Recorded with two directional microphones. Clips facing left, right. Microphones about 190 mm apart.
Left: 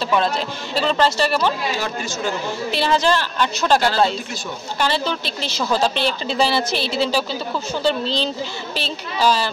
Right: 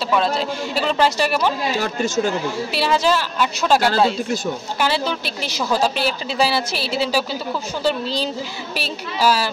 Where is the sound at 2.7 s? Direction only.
5° right (ahead or behind).